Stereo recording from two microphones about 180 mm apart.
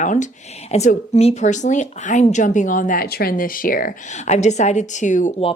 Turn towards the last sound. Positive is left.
turn(degrees=40)  # may be behind; listen again after turning